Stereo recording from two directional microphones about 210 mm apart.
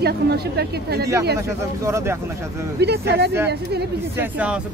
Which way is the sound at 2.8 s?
50° right (ahead or behind).